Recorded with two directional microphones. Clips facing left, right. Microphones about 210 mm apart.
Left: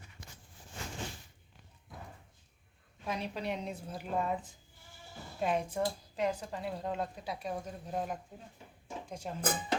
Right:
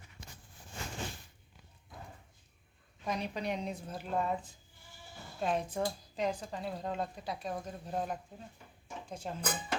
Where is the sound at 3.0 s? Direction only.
5° left (ahead or behind).